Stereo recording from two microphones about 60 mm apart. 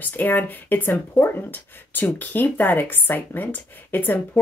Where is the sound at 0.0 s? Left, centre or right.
Left.